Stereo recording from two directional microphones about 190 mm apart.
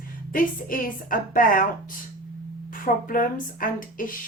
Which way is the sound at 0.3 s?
45° left (ahead or behind).